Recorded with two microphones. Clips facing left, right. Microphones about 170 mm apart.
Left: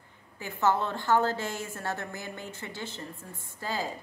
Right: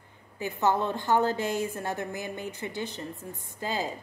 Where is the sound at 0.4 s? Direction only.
15° right (ahead or behind).